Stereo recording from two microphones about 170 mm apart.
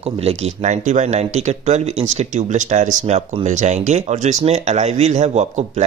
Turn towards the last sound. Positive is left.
turn(degrees=-40)  # may be behind; listen again after turning